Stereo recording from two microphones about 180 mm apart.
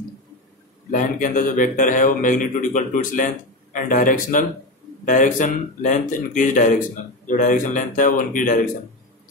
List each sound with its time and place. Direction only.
0.9 s a man's voice: 45° left (ahead or behind)